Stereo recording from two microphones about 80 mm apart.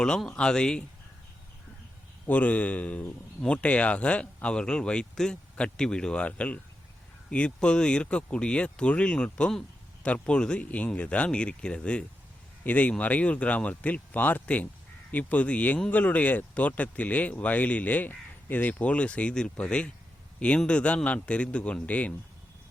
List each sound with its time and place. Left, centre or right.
0.0 s speech: centre
2.2 s speech: centre